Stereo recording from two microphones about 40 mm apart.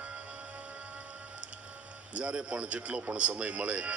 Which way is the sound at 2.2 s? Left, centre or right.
Right.